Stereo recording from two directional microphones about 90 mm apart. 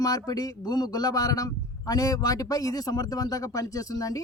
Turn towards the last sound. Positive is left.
turn(degrees=40)  # may be behind; listen again after turning